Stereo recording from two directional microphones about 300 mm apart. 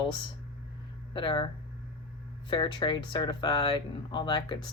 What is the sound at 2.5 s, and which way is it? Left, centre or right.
Speech, centre.